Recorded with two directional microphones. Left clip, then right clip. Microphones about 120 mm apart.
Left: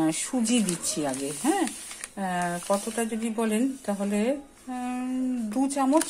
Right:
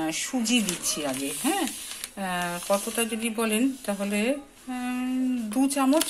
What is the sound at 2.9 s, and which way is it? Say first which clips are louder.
Speech: right 1 dB; 45° left (ahead or behind).